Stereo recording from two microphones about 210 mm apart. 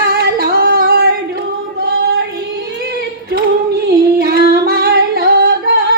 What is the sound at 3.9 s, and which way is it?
Singing, 45° right (ahead or behind).